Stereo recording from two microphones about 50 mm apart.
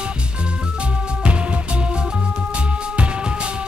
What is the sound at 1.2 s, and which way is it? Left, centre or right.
Music, right.